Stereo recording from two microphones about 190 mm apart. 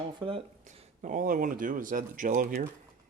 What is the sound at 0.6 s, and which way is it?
Speech, 40° right (ahead or behind).